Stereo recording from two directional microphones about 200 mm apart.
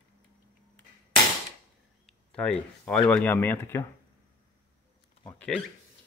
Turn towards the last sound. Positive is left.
turn(degrees=5)  # may be behind; listen again after turning